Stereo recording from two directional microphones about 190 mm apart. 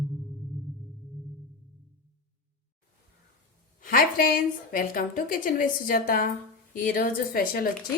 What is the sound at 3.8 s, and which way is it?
A woman's voice, 50° left (ahead or behind).